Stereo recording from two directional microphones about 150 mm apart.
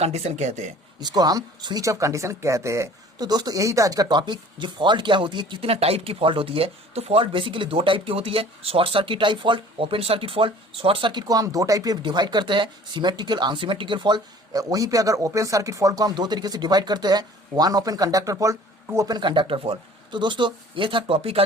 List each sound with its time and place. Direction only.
0.0 s speech: 45° right (ahead or behind)
1.0 s speech: 25° right (ahead or behind)